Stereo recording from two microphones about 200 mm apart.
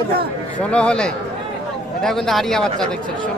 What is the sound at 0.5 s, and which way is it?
Speech, 5° left (ahead or behind).